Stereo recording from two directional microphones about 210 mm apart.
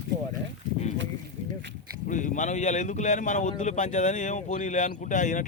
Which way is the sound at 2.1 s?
35° left (ahead or behind).